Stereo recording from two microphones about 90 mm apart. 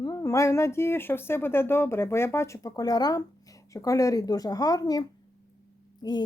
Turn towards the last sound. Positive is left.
turn(degrees=55)  # may be behind; listen again after turning